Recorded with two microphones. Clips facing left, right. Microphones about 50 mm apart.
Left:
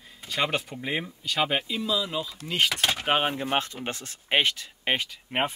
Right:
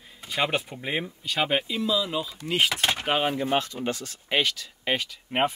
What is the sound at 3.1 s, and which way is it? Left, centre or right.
Speech, left.